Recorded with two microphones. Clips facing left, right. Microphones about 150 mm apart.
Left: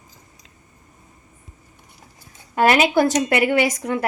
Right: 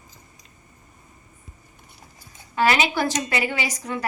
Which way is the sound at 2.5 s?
50° left (ahead or behind).